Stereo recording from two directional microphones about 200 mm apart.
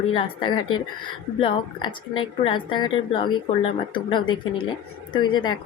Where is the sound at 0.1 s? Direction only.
25° left (ahead or behind).